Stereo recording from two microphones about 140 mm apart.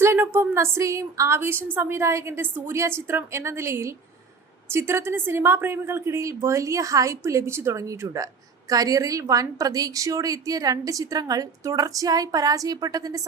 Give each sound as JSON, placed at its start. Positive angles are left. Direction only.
{"t": 0.0, "sound": "a woman's voice", "side_deg": -15}